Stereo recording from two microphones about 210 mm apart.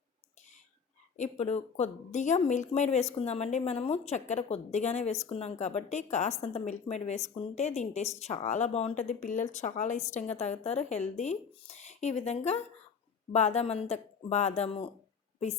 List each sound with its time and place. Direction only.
1.1 s speech: 35° left (ahead or behind)